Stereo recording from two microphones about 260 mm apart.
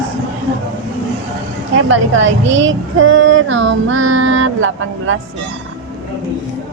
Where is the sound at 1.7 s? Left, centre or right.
Right.